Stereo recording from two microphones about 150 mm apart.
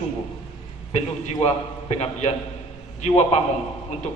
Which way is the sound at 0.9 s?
45° left (ahead or behind).